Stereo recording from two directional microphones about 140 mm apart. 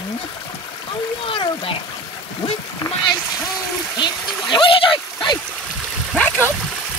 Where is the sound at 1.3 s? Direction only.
40° left (ahead or behind).